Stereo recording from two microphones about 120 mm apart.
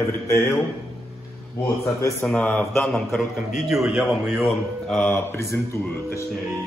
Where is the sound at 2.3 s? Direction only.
10° left (ahead or behind).